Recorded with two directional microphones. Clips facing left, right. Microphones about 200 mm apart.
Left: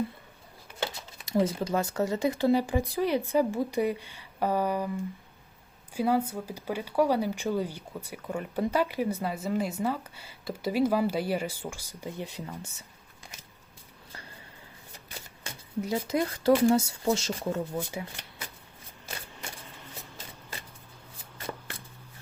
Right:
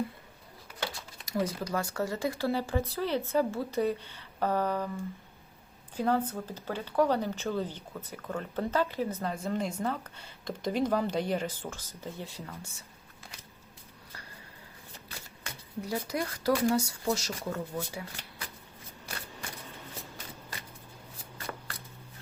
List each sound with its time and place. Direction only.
0.8 s speech: 25° left (ahead or behind)
15.8 s speech: 20° left (ahead or behind)